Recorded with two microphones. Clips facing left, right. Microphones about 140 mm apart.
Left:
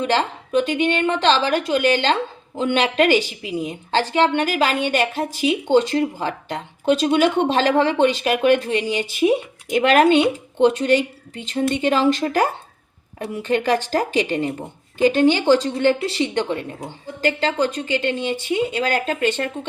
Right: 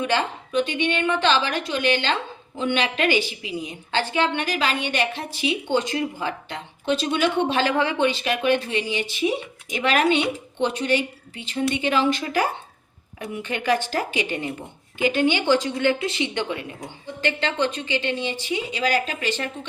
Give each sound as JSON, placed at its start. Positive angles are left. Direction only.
{"t": 0.1, "sound": "a woman's voice", "side_deg": 40}